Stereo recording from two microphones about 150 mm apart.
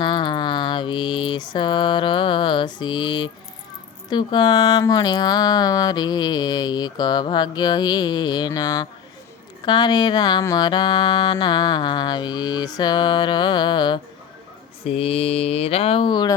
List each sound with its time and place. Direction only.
0.0 s mantra: 30° left (ahead or behind)
4.1 s speech: 30° left (ahead or behind)
14.8 s mantra: 40° left (ahead or behind)